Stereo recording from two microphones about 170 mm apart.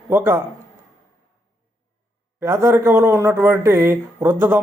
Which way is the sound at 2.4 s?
20° right (ahead or behind).